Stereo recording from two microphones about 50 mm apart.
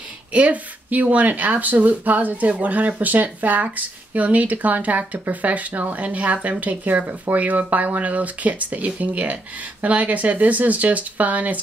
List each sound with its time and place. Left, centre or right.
0.3 s speech: right